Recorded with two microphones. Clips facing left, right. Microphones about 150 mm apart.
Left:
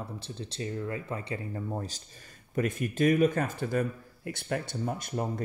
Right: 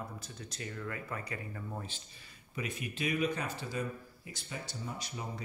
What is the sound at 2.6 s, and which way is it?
A man's voice, 45° left (ahead or behind).